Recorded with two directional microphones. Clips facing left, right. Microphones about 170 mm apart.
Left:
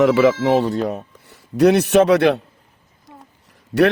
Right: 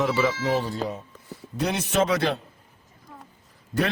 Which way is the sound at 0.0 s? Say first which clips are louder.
Left 10 dB; 70° left (ahead or behind).